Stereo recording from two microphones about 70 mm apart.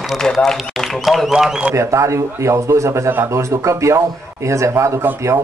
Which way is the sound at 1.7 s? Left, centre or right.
Right.